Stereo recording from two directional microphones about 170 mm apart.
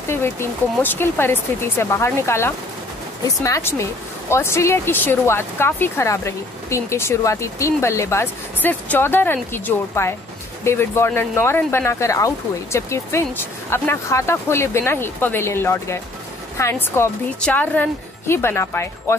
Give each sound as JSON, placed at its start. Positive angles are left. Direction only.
{"t": 0.1, "sound": "speech", "side_deg": 15}